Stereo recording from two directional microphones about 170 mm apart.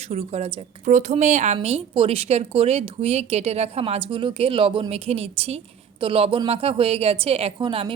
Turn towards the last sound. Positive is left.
turn(degrees=-30)  # may be behind; listen again after turning